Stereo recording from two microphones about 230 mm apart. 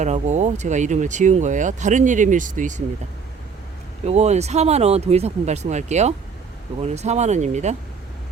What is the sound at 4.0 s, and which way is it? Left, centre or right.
Speech, right.